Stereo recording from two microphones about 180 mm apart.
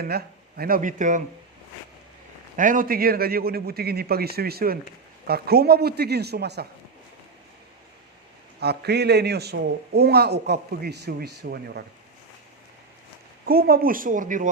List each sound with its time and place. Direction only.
0.0 s speech: 60° right (ahead or behind)
2.6 s a man's voice: 45° right (ahead or behind); by 6.7 s 65° right (ahead or behind)
8.6 s a man's voice: 65° right (ahead or behind)
13.4 s speech: 55° right (ahead or behind)